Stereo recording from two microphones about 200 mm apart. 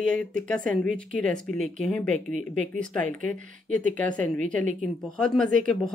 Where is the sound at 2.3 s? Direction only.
40° right (ahead or behind).